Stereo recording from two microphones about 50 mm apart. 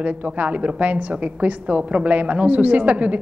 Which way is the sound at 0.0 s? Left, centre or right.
Right.